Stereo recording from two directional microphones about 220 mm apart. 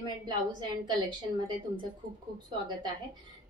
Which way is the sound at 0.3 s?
20° right (ahead or behind).